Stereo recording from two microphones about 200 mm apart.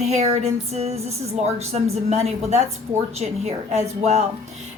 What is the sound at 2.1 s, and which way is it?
Speech, 35° right (ahead or behind).